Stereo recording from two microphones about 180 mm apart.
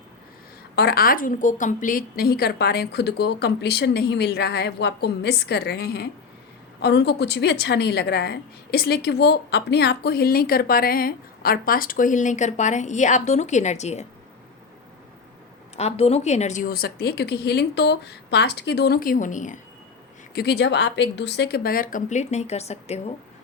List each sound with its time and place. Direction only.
0.8 s a woman's voice: 60° left (ahead or behind); by 14.1 s 40° left (ahead or behind)
15.7 s a woman's voice: 35° left (ahead or behind)
20.3 s a woman's voice: 65° left (ahead or behind); by 23.1 s 35° left (ahead or behind)